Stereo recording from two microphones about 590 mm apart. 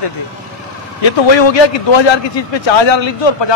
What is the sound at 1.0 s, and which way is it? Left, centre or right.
A man's voice, left.